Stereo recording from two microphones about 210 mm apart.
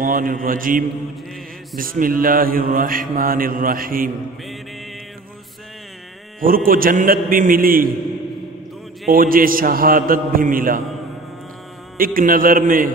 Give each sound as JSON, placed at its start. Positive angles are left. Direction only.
{"t": 0.0, "sound": "a man's voice", "side_deg": -40}
{"t": 1.8, "sound": "mantra", "side_deg": -40}
{"t": 6.4, "sound": "mantra", "side_deg": -45}
{"t": 9.1, "sound": "mantra", "side_deg": -45}
{"t": 12.0, "sound": "a man's voice", "side_deg": -40}